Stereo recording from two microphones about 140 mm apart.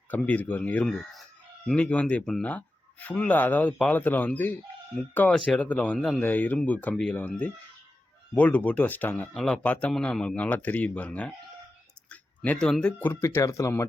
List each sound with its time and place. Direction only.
0.1 s speech: 10° left (ahead or behind)
13.2 s speech: 20° left (ahead or behind)